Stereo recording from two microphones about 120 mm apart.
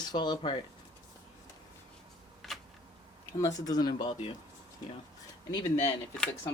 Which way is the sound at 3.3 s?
30° left (ahead or behind).